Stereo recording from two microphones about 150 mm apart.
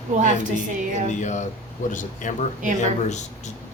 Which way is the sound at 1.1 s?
55° left (ahead or behind).